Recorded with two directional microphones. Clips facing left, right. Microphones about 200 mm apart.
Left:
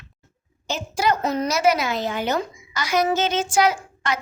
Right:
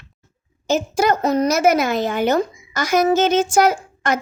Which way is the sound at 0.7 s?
45° right (ahead or behind).